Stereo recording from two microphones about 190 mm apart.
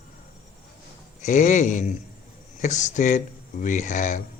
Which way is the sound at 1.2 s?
40° left (ahead or behind).